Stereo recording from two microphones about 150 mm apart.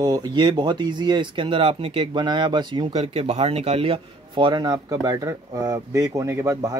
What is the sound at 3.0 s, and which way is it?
Speech, 45° right (ahead or behind).